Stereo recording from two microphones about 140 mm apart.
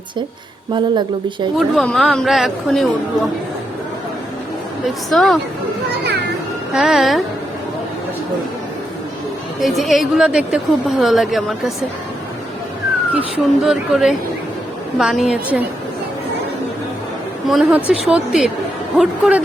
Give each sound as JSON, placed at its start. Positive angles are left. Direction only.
{"t": 0.7, "sound": "speech", "side_deg": -35}
{"t": 1.5, "sound": "speech", "side_deg": 0}
{"t": 5.1, "sound": "speech", "side_deg": 0}
{"t": 6.7, "sound": "speech", "side_deg": 0}
{"t": 9.6, "sound": "speech", "side_deg": 0}
{"t": 13.1, "sound": "speech", "side_deg": -5}
{"t": 17.4, "sound": "speech", "side_deg": 0}